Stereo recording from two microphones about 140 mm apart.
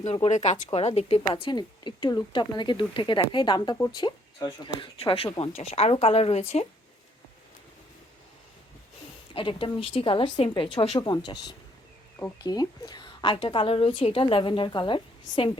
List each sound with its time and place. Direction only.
0.0 s speech: 50° left (ahead or behind)
9.3 s speech: 35° left (ahead or behind)